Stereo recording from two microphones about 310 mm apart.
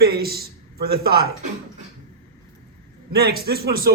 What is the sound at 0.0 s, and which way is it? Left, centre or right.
A man's voice, right.